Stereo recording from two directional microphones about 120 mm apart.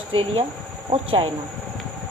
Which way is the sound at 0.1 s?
55° right (ahead or behind).